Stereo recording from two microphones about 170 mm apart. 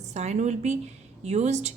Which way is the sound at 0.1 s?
40° right (ahead or behind).